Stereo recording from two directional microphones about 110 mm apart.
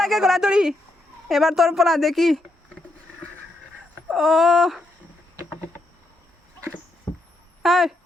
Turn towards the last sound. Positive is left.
turn(degrees=0)  # may be behind; listen again after turning